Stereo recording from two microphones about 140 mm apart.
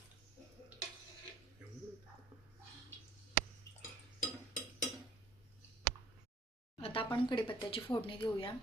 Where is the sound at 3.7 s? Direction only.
20° left (ahead or behind).